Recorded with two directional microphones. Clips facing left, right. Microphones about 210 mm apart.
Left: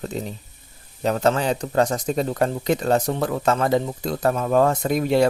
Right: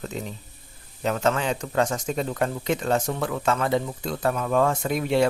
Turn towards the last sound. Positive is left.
turn(degrees=40)  # may be behind; listen again after turning